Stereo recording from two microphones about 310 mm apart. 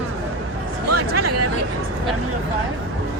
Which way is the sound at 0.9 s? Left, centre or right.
Right.